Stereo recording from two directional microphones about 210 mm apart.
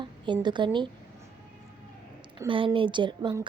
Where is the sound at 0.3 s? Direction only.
20° right (ahead or behind).